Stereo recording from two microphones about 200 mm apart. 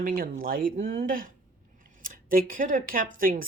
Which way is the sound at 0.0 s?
45° right (ahead or behind).